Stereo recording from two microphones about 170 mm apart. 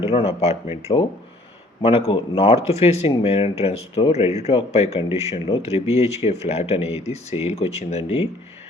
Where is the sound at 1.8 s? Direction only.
35° left (ahead or behind).